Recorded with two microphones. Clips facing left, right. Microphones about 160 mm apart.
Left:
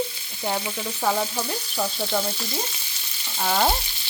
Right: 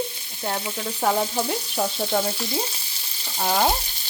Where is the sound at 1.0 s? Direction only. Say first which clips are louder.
Right 2 dB; 20° right (ahead or behind).